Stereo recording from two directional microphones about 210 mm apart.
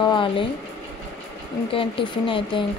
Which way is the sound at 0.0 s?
20° left (ahead or behind).